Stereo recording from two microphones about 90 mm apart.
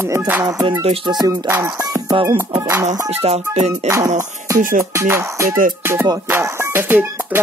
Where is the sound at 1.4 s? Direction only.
25° right (ahead or behind).